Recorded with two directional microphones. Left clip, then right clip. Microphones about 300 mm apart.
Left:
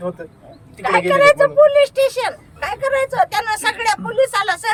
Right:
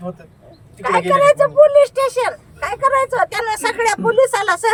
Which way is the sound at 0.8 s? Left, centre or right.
Centre.